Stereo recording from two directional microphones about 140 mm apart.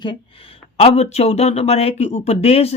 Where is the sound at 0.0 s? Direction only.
35° left (ahead or behind).